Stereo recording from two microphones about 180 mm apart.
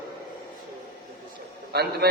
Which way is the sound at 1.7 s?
60° right (ahead or behind).